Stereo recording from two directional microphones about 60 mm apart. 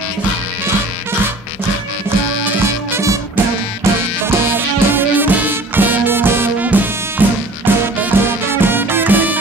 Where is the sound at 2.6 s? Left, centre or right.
Right.